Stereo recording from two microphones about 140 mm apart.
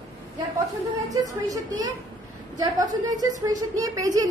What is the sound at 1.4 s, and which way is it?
Speech, 25° right (ahead or behind).